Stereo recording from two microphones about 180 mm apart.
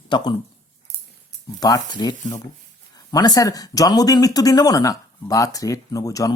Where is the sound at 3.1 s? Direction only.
20° left (ahead or behind).